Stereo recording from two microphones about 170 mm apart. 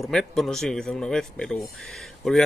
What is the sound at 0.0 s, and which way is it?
Speech, centre (ahead or behind).